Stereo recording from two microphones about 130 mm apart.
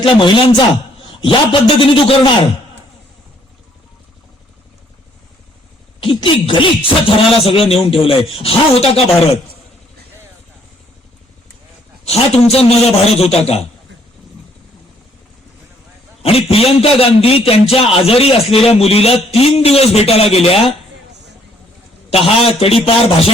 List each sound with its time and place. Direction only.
0.0 s a man's voice: 40° left (ahead or behind)
6.1 s speech: 45° left (ahead or behind)
12.0 s speech: 55° left (ahead or behind)
16.2 s speech: 50° left (ahead or behind)
22.1 s speech: 50° left (ahead or behind)